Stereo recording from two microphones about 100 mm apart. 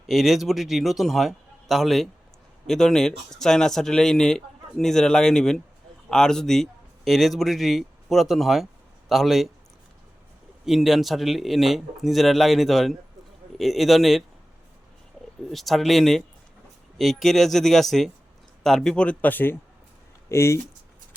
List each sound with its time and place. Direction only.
0.1 s speech: centre (ahead or behind)
10.7 s speech: centre (ahead or behind)
15.4 s speech: centre (ahead or behind); by 20.6 s 30° left (ahead or behind)